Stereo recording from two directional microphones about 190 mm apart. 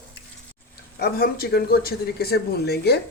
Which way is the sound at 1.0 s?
55° left (ahead or behind).